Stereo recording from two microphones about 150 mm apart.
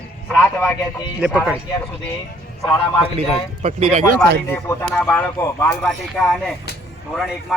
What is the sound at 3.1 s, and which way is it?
Speech, 50° right (ahead or behind).